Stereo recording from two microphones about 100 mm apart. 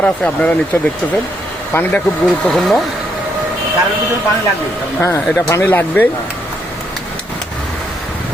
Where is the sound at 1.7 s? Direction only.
20° left (ahead or behind).